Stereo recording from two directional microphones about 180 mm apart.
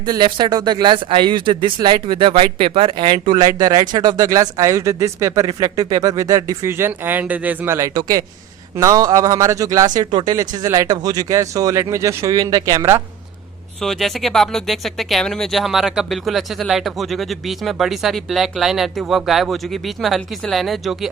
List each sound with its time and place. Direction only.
0.0 s speech: 25° right (ahead or behind)
13.8 s speech: centre (ahead or behind)